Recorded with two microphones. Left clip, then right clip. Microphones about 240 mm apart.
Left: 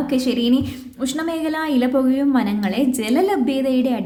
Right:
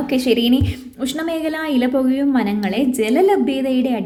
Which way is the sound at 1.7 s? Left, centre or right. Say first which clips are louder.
Right 1 dB; centre.